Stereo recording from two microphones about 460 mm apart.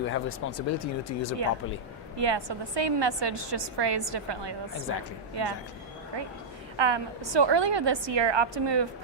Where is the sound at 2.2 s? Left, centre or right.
Right.